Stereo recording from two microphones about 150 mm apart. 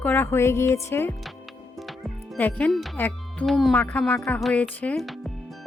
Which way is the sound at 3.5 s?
Centre (ahead or behind).